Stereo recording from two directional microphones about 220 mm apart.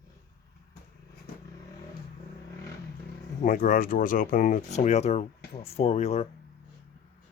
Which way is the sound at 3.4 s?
35° left (ahead or behind).